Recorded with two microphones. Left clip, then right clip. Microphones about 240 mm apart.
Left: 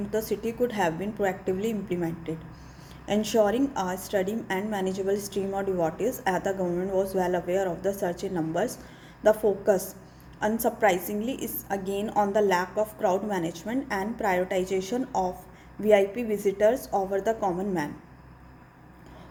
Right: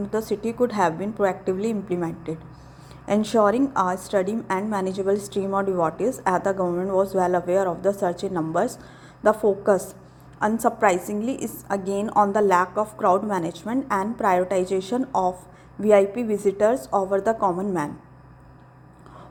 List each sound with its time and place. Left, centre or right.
0.1 s a woman's voice: centre